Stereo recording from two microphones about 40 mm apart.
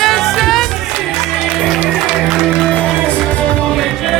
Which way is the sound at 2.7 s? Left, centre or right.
Left.